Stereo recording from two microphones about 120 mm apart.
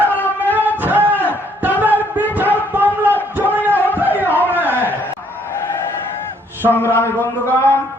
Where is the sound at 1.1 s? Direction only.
15° left (ahead or behind).